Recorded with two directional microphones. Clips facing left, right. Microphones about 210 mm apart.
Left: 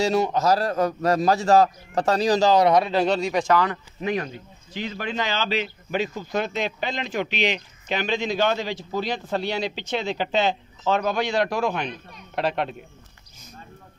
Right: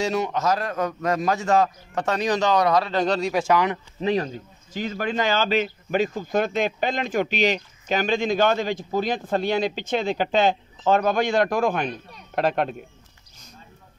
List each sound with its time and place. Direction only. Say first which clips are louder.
0.0 s a man's voice: left 2 dB; 35° left (ahead or behind)
2.9 s speech: left 1 dB; 5° left (ahead or behind); by 3.8 s 15° right (ahead or behind)
4.0 s speech: right 3 dB; 30° right (ahead or behind)